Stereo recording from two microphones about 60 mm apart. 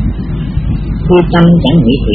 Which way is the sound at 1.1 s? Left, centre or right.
Centre.